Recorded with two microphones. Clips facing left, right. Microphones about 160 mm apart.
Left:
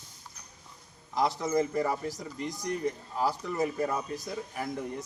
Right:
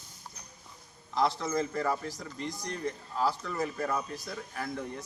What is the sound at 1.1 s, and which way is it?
Speech, 15° left (ahead or behind).